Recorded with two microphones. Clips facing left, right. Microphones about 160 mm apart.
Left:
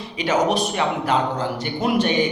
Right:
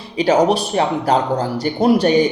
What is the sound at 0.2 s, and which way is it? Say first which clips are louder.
A man's voice: right 5 dB; 35° right (ahead or behind).